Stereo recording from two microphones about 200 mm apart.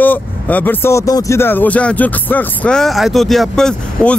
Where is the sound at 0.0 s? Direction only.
10° left (ahead or behind).